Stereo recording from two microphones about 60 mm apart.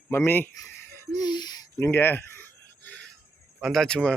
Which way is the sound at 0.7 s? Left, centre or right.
Left.